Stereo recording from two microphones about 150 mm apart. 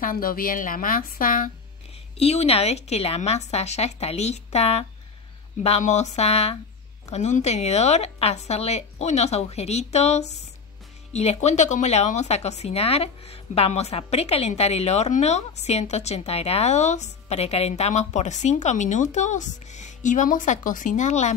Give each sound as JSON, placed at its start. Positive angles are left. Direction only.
{"t": 0.0, "sound": "a woman's voice", "side_deg": 70}
{"t": 2.1, "sound": "speech", "side_deg": 45}